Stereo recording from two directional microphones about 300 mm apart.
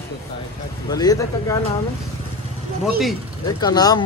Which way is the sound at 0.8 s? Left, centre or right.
Centre.